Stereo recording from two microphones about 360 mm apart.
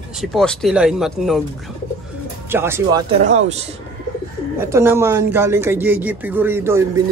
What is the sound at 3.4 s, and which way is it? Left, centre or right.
Speech, centre.